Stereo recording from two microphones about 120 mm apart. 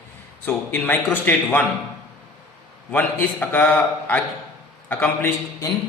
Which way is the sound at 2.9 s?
15° left (ahead or behind).